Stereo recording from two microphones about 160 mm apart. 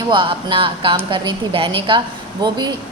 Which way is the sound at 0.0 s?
30° right (ahead or behind).